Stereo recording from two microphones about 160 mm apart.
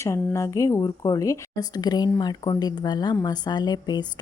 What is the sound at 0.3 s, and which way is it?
A woman's voice, 20° left (ahead or behind).